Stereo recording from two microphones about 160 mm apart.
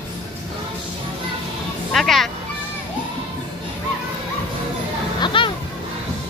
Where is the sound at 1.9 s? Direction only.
Centre (ahead or behind).